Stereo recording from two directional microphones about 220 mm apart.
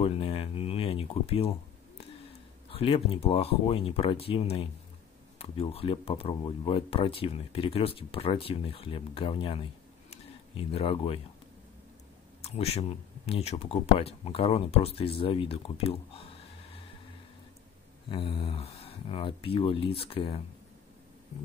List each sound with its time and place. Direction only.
0.0 s speech: 25° left (ahead or behind)
2.7 s speech: 25° left (ahead or behind)
10.7 s speech: 25° left (ahead or behind)
12.4 s speech: 30° left (ahead or behind)
18.1 s speech: 25° left (ahead or behind)